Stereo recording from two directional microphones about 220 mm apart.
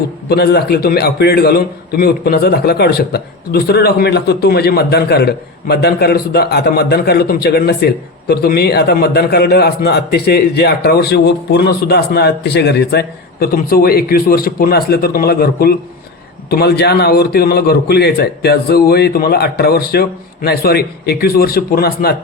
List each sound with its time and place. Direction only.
0.3 s a man's voice: 45° left (ahead or behind)